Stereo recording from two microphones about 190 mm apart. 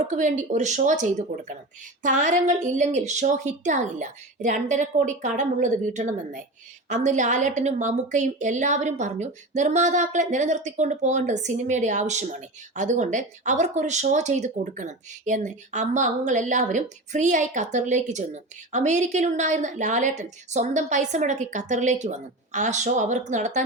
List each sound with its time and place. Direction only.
0.1 s a woman's voice: 40° right (ahead or behind)